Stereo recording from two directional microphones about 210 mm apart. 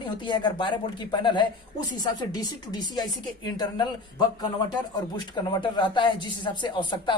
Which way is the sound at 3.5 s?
20° left (ahead or behind).